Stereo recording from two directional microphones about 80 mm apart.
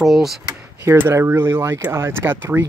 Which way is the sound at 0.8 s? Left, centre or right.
Right.